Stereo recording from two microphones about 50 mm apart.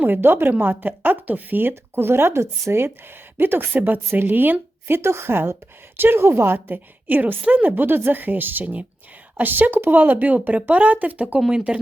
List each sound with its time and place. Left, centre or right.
0.0 s speech: right
1.7 s speech: right
3.7 s speech: right
4.9 s a woman's voice: right
11.3 s speech: centre